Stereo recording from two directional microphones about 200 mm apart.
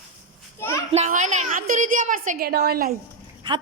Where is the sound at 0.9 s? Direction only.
35° right (ahead or behind).